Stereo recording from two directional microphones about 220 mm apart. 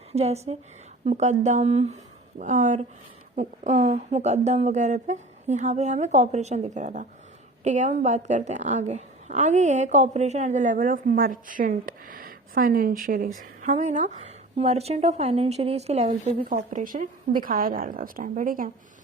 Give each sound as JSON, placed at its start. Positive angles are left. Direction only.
{"t": 0.1, "sound": "a woman's voice", "side_deg": -30}